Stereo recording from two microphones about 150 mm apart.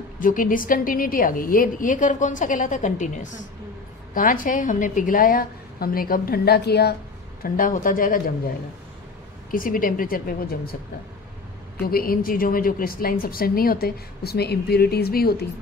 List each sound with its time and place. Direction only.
0.2 s a woman's voice: 65° left (ahead or behind); by 7.0 s 90° left
7.4 s a woman's voice: 65° left (ahead or behind)
9.5 s a woman's voice: 70° left (ahead or behind); by 10.8 s 90° left
11.8 s a woman's voice: 80° left